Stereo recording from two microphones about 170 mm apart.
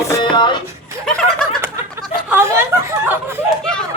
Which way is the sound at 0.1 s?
25° left (ahead or behind).